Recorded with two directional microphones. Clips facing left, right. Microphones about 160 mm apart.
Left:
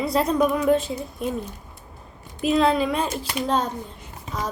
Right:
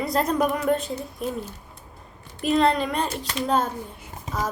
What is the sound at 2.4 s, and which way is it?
A woman's voice, centre (ahead or behind).